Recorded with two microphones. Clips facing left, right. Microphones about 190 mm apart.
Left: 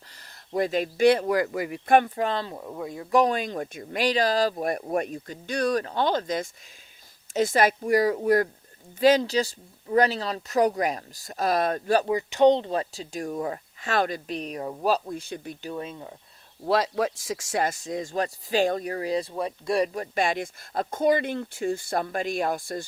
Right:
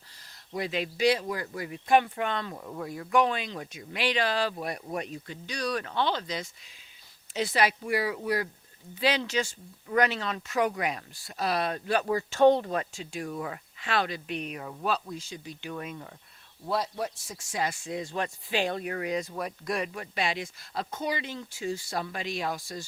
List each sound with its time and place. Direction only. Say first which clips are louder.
0.2 s speech: left 7 dB; 50° left (ahead or behind); by 1.8 s 85° left
2.1 s speech: left 4 dB; 35° left (ahead or behind)
2.6 s speech: left 2 dB; 15° left (ahead or behind)
3.1 s speech: left 4 dB; 40° left (ahead or behind)
12.0 s speech: even; 20° left (ahead or behind); by 15.5 s 55° left (ahead or behind)
15.7 s speech: left 3 dB; 30° left (ahead or behind)
16.6 s speech: left 7 dB; 90° left
17.6 s speech: left 2 dB; 40° left (ahead or behind)